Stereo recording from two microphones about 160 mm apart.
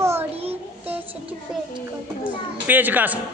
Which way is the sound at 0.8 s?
10° right (ahead or behind).